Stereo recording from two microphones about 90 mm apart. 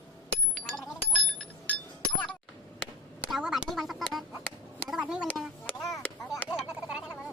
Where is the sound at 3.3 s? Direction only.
Centre (ahead or behind).